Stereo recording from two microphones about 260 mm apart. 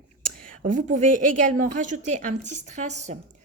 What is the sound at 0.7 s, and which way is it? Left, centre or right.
A woman's voice, right.